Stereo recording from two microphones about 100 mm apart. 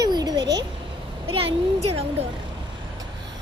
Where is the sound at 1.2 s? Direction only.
65° right (ahead or behind); by 2.2 s 90° right.